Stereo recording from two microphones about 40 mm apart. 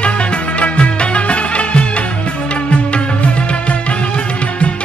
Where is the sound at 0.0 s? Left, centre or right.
Left.